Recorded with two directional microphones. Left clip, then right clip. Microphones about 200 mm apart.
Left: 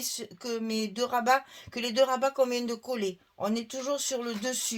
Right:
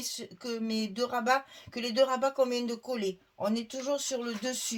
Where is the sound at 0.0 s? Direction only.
40° left (ahead or behind).